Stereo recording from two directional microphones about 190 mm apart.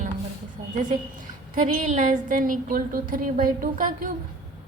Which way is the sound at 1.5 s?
40° right (ahead or behind).